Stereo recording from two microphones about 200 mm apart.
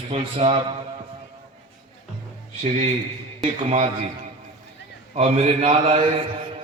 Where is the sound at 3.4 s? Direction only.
30° right (ahead or behind).